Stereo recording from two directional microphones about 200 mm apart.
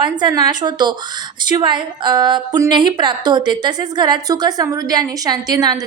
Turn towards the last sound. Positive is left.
turn(degrees=-20)  # may be behind; listen again after turning